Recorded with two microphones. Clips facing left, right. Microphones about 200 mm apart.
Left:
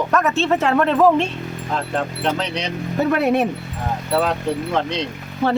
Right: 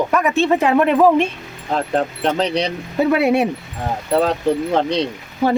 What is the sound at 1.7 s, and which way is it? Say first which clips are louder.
Speech: right 5 dB; 35° right (ahead or behind).